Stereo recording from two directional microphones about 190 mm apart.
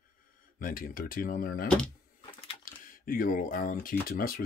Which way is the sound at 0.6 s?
45° left (ahead or behind).